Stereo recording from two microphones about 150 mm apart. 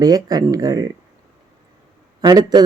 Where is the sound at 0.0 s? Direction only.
25° right (ahead or behind).